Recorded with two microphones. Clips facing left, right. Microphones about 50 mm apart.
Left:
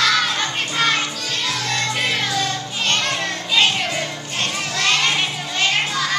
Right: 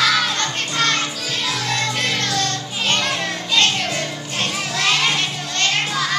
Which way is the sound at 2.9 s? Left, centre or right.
Centre.